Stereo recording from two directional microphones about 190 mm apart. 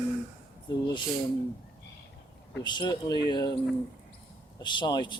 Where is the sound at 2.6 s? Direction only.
25° left (ahead or behind).